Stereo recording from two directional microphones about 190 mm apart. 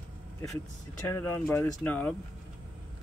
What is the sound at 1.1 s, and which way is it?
Speech, 10° left (ahead or behind).